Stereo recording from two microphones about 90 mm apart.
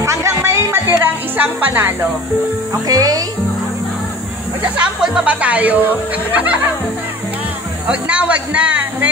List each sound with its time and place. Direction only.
0.0 s music: 30° right (ahead or behind)
1.4 s speech: 20° right (ahead or behind)
2.9 s speech: 45° right (ahead or behind)
4.7 s speech: 10° right (ahead or behind)
7.9 s speech: 15° right (ahead or behind)